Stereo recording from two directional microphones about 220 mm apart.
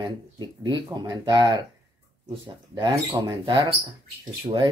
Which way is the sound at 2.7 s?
15° right (ahead or behind).